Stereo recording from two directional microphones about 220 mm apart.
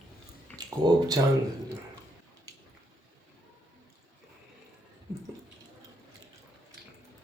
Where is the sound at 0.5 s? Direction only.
15° right (ahead or behind).